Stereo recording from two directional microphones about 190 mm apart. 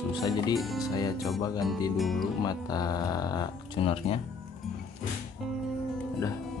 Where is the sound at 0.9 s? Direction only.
20° left (ahead or behind).